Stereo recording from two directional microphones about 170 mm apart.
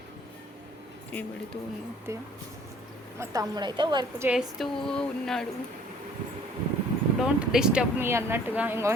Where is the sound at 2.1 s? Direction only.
15° right (ahead or behind).